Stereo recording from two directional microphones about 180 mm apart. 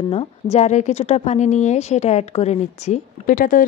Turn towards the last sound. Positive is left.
turn(degrees=50)  # may be behind; listen again after turning